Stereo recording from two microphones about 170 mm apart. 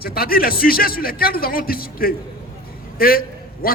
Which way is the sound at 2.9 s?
60° left (ahead or behind).